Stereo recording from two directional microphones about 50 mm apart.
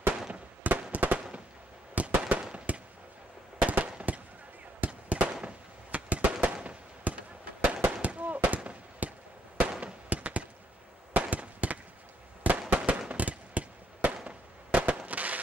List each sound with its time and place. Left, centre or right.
0.9 s fireworks: right
3.6 s firecracker: right
4.7 s fireworks: right
8.5 s firecracker: right
9.6 s fireworks: centre
10.0 s fireworks: right
11.1 s a sound: right
12.4 s fireworks: right